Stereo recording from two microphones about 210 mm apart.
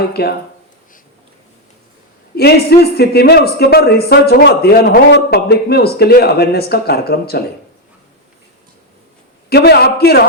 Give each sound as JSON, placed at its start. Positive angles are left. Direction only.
{"t": 0.1, "sound": "speech", "side_deg": 50}
{"t": 2.3, "sound": "speech", "side_deg": 50}
{"t": 9.5, "sound": "speech", "side_deg": 50}